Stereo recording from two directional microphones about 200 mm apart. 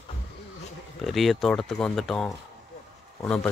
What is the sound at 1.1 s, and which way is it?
Speech, centre (ahead or behind).